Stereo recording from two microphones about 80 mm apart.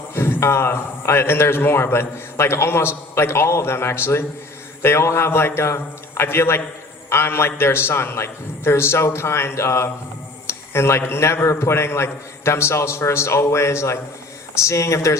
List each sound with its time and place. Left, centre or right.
0.1 s a man's voice: left